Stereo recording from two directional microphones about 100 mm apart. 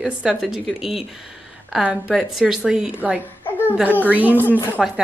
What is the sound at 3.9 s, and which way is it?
Speech, 15° left (ahead or behind).